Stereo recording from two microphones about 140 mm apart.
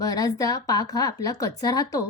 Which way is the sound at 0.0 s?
25° left (ahead or behind).